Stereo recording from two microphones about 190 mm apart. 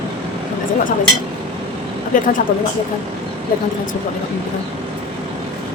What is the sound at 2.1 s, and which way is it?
Speech, 45° left (ahead or behind).